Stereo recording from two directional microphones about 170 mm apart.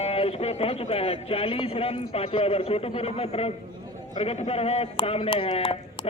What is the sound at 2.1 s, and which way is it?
Speech, 35° left (ahead or behind).